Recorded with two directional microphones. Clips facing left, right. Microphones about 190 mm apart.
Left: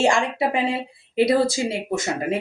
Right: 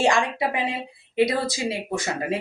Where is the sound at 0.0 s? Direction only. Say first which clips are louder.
Left 2 dB; 25° left (ahead or behind).